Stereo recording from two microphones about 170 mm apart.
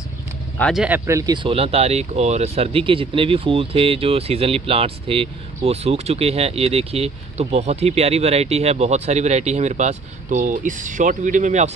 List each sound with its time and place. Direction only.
0.6 s speech: 5° left (ahead or behind)
0.8 s speech: 15° right (ahead or behind); by 11.7 s 45° right (ahead or behind)